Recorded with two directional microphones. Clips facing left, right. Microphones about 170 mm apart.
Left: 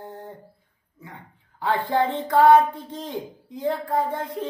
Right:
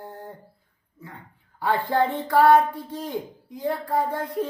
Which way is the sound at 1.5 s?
20° left (ahead or behind).